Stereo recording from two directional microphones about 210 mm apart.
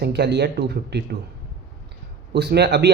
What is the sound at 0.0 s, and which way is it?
Speech, 55° right (ahead or behind).